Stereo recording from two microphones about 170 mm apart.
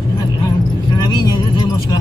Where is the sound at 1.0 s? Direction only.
20° left (ahead or behind).